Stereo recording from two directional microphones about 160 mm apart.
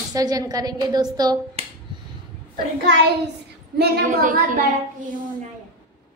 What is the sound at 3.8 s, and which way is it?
Speech, 90° right.